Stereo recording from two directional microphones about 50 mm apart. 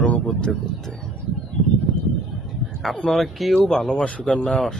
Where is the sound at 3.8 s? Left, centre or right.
Centre.